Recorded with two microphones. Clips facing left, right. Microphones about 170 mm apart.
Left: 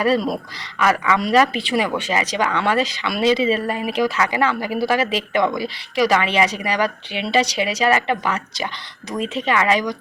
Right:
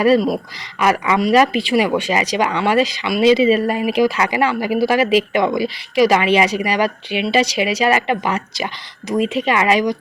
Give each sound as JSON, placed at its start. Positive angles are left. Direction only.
{"t": 0.8, "sound": "speech", "side_deg": -15}